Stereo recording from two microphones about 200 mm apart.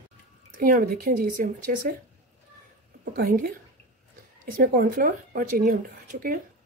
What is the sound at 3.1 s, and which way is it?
Speech, 45° right (ahead or behind).